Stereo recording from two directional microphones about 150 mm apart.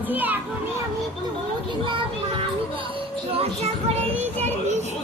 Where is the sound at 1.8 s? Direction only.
35° right (ahead or behind).